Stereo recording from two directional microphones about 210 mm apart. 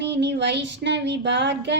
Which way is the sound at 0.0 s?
55° right (ahead or behind).